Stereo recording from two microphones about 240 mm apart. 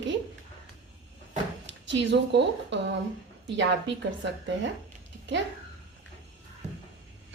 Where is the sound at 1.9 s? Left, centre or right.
Right.